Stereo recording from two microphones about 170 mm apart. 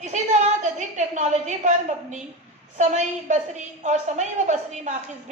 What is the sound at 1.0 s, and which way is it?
A woman's voice, 45° right (ahead or behind).